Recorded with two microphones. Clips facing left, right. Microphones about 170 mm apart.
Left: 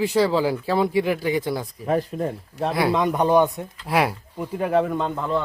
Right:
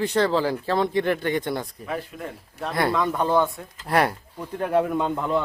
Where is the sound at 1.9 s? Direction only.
35° left (ahead or behind).